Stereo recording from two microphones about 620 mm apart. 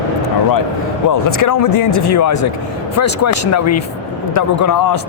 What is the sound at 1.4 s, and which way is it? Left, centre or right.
A man's voice, left.